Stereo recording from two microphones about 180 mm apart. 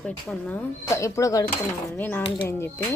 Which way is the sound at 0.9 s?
15° left (ahead or behind).